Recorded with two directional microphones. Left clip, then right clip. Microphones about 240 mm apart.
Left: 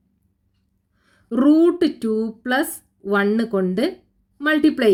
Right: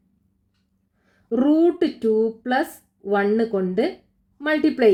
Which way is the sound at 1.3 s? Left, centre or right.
Left.